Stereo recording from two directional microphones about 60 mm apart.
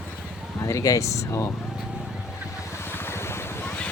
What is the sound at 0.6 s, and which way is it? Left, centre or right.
Speech, left.